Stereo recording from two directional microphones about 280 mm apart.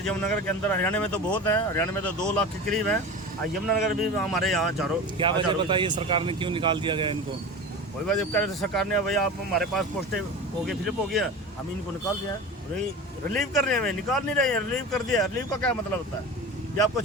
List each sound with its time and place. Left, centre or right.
0.0 s speech: centre
5.1 s speech: centre
8.0 s speech: centre
13.3 s speech: centre